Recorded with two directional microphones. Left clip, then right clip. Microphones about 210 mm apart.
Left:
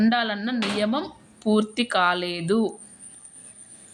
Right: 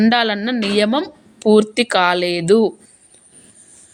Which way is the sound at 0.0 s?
40° right (ahead or behind).